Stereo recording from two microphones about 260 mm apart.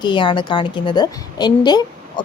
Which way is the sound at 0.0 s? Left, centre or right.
Centre.